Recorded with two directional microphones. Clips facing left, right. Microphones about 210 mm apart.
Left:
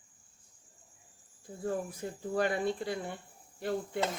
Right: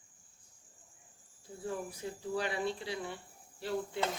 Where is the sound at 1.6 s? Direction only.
50° left (ahead or behind).